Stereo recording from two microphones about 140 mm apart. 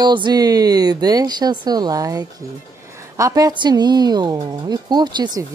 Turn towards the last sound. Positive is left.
turn(degrees=-30)  # may be behind; listen again after turning